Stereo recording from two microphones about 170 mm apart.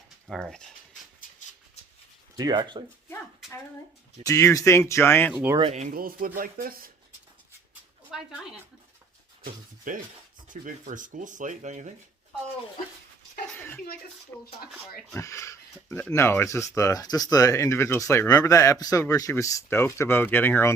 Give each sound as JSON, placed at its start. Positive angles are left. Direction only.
{"t": 0.3, "sound": "speech", "side_deg": 5}
{"t": 2.3, "sound": "speech", "side_deg": -25}
{"t": 4.2, "sound": "speech", "side_deg": 20}
{"t": 5.3, "sound": "speech", "side_deg": -10}
{"t": 5.7, "sound": "speech", "side_deg": -45}
{"t": 6.0, "sound": "speech", "side_deg": -60}
{"t": 8.1, "sound": "speech", "side_deg": 0}
{"t": 9.4, "sound": "speech", "side_deg": -50}
{"t": 14.3, "sound": "speech", "side_deg": 10}